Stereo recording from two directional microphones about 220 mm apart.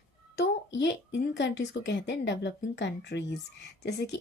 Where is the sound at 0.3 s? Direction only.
50° left (ahead or behind).